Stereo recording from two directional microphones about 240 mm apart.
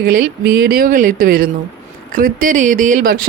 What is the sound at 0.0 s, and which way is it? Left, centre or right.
Speech, right.